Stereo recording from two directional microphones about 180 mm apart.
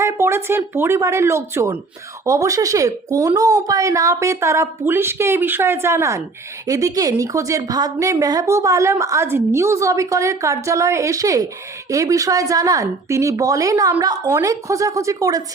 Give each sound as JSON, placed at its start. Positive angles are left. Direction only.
{"t": 0.0, "sound": "a woman's voice", "side_deg": -15}